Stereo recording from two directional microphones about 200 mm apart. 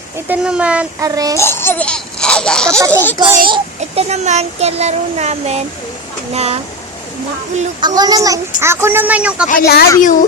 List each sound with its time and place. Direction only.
0.3 s a woman's voice: 5° right (ahead or behind)
1.0 s a woman's voice: 15° right (ahead or behind)
1.4 s a sound: 10° left (ahead or behind)
2.9 s a child's voice: 10° left (ahead or behind)
3.2 s a child's voice: 25° right (ahead or behind)
7.8 s a woman's voice: 20° right (ahead or behind)
9.5 s speech: 50° left (ahead or behind)